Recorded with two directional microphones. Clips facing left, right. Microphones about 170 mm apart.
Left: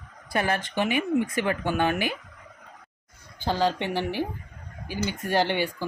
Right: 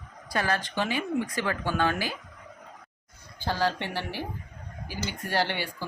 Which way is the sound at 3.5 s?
20° left (ahead or behind).